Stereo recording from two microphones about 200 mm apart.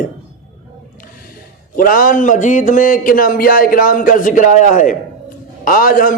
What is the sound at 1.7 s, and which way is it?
Speech, 45° left (ahead or behind).